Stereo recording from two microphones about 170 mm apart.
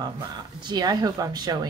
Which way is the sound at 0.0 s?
25° right (ahead or behind).